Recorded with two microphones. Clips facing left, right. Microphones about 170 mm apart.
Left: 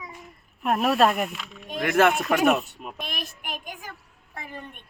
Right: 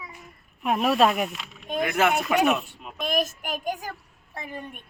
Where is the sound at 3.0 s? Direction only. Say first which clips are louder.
Right 13 dB; 45° right (ahead or behind).